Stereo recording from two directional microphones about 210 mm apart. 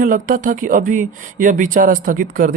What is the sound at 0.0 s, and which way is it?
Speech, 40° right (ahead or behind).